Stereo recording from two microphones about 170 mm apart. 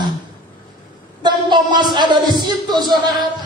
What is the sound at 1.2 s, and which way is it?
Music, 25° right (ahead or behind).